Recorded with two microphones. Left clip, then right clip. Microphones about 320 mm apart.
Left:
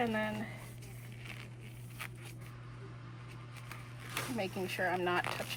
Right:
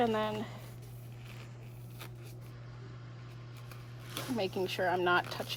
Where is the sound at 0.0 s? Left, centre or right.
Centre.